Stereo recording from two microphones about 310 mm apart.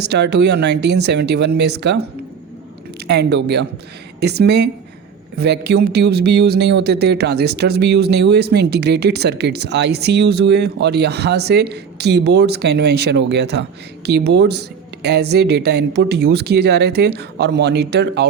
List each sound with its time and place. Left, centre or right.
0.0 s speech: right
3.1 s speech: right